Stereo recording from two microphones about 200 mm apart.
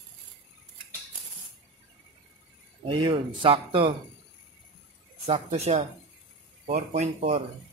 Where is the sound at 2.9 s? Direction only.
25° right (ahead or behind).